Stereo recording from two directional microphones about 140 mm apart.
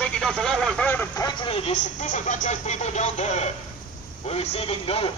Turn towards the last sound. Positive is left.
turn(degrees=40)  # may be behind; listen again after turning